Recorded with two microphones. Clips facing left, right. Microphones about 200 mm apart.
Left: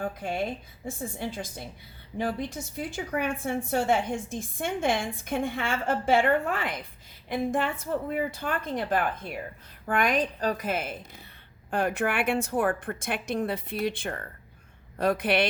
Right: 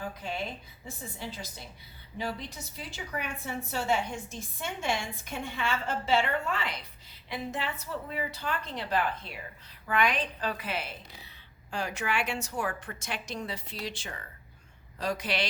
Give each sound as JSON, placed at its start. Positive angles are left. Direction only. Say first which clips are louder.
{"t": 0.0, "sound": "a woman's voice", "louder": "left 6 dB", "side_deg": 50}